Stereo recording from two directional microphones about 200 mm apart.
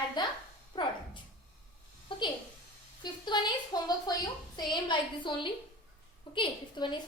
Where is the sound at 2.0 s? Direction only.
25° left (ahead or behind).